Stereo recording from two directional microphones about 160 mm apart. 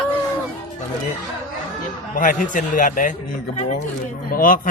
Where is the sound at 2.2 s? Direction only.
55° left (ahead or behind).